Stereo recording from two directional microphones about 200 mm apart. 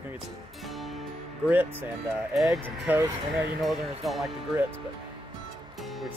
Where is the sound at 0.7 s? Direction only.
Centre (ahead or behind).